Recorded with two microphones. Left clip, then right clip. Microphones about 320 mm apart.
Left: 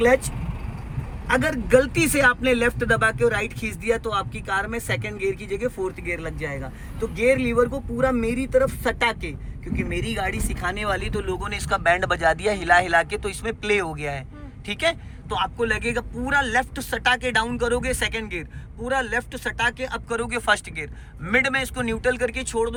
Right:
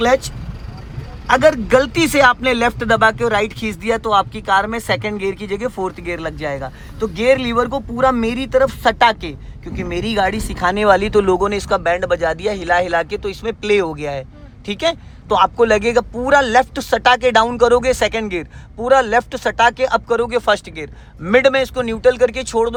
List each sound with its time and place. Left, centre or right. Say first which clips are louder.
0.0 s speech: right 4 dB; centre